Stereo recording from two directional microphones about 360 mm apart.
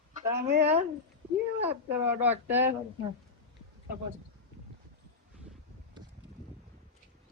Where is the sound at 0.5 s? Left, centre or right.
Centre.